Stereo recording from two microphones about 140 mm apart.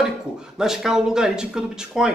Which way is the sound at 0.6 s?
5° right (ahead or behind).